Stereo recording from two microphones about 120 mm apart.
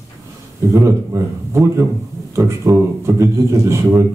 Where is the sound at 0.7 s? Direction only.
25° right (ahead or behind).